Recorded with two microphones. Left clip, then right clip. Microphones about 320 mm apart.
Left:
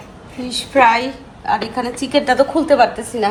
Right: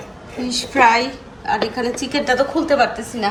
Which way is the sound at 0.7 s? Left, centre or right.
Centre.